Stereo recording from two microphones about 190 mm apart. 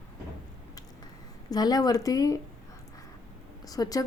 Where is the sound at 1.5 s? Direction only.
20° left (ahead or behind).